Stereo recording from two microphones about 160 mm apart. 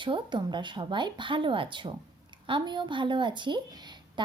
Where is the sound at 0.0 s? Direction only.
30° right (ahead or behind).